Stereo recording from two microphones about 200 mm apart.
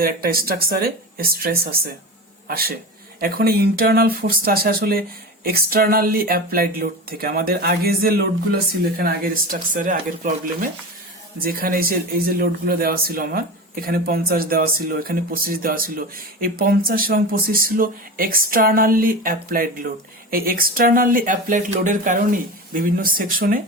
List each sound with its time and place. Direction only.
0.0 s speech: 45° right (ahead or behind)